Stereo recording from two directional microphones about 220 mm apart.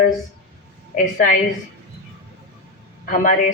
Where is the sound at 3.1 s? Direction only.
35° left (ahead or behind).